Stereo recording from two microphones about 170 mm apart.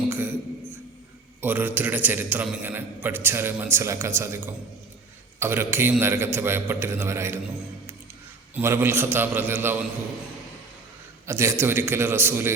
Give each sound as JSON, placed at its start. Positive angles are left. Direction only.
{"t": 0.1, "sound": "a sound", "side_deg": -10}
{"t": 1.4, "sound": "a man's voice", "side_deg": -10}
{"t": 8.5, "sound": "a man's voice", "side_deg": -15}
{"t": 11.3, "sound": "a man's voice", "side_deg": -15}